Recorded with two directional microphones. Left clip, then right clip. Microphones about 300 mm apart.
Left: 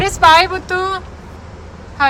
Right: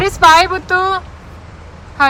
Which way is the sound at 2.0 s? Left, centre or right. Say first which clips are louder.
Right 2 dB; centre.